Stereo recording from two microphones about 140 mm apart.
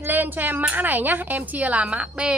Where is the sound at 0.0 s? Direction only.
15° right (ahead or behind).